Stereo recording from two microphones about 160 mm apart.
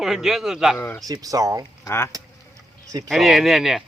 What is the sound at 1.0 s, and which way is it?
Speech, 20° right (ahead or behind).